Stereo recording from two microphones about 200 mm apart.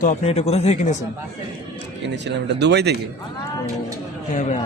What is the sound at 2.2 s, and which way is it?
Speech, 55° right (ahead or behind).